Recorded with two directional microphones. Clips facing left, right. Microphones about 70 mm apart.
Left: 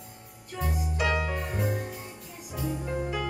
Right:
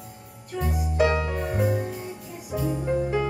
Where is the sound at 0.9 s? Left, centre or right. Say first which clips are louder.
Right 7 dB; right.